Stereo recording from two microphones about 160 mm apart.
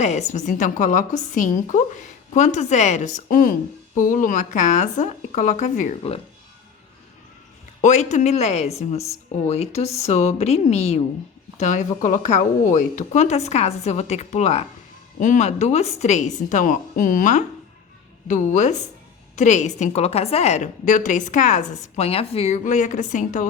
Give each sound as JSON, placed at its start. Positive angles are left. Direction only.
{"t": 0.0, "sound": "a woman's voice", "side_deg": 45}
{"t": 6.0, "sound": "a woman's voice", "side_deg": 40}
{"t": 7.8, "sound": "a woman's voice", "side_deg": 50}